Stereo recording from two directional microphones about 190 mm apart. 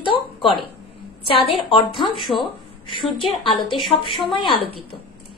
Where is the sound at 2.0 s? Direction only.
Centre (ahead or behind).